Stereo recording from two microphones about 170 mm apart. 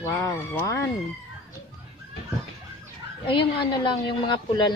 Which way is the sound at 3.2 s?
30° left (ahead or behind).